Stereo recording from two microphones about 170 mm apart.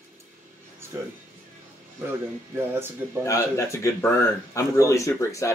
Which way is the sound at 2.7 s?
15° right (ahead or behind).